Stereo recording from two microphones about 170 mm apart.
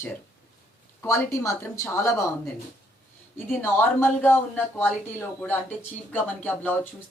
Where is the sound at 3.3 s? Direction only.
10° left (ahead or behind).